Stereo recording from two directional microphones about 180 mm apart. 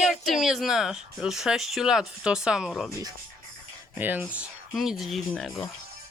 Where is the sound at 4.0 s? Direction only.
10° right (ahead or behind).